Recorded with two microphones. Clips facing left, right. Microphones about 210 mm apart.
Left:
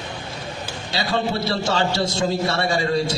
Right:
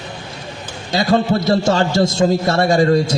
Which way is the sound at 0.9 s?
45° right (ahead or behind).